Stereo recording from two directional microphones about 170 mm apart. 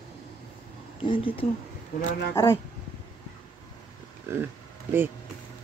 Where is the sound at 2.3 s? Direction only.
15° left (ahead or behind).